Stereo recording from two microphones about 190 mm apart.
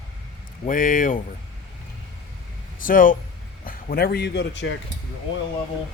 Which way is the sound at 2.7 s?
45° left (ahead or behind).